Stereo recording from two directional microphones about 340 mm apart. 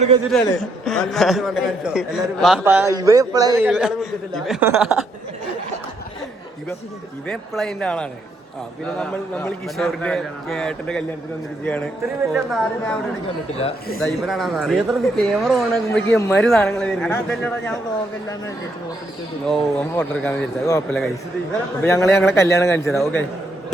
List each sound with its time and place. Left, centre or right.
0.3 s speech: centre
7.3 s speech: centre
12.3 s speech: centre
13.6 s speech: left
14.0 s speech: centre
19.5 s a man's voice: centre